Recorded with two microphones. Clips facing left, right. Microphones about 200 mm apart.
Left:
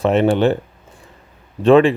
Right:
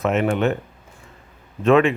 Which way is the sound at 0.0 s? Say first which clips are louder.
Left 5 dB; 30° left (ahead or behind).